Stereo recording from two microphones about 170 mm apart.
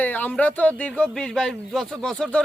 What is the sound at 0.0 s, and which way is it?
A man's voice, 10° left (ahead or behind).